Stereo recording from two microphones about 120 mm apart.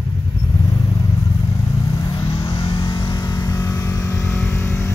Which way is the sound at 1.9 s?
35° left (ahead or behind).